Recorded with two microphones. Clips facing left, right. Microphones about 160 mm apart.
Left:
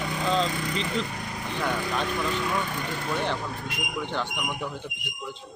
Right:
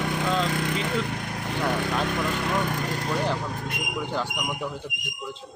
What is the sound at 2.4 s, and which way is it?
Speech, 55° right (ahead or behind).